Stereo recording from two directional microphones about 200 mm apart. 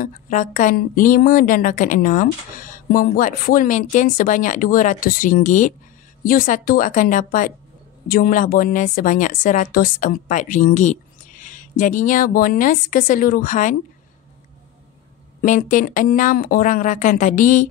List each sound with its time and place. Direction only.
0.0 s a woman's voice: 40° left (ahead or behind)
15.4 s a woman's voice: 40° left (ahead or behind)